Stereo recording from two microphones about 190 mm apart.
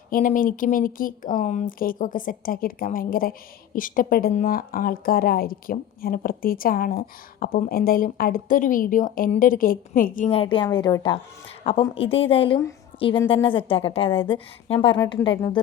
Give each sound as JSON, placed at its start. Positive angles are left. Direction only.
{"t": 0.1, "sound": "a woman's voice", "side_deg": 45}
{"t": 10.3, "sound": "a woman's voice", "side_deg": 25}